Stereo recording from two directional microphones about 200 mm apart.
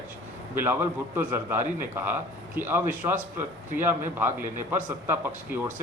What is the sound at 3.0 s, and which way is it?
Speech, 25° right (ahead or behind).